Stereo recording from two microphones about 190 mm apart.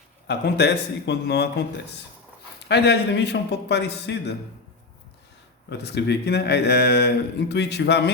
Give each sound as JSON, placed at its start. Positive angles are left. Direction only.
{"t": 0.3, "sound": "speech", "side_deg": 60}
{"t": 2.6, "sound": "speech", "side_deg": 60}
{"t": 5.6, "sound": "speech", "side_deg": 60}